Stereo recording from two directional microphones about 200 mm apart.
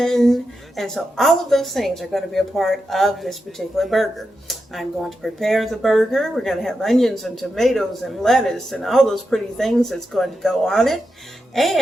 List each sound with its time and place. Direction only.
0.0 s speech: centre (ahead or behind)